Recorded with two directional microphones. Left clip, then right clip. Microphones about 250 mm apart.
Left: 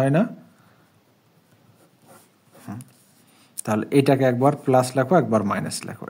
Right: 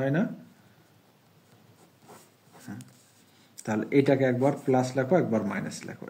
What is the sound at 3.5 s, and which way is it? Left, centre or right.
Speech, left.